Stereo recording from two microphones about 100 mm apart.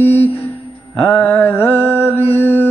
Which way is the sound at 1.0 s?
15° left (ahead or behind).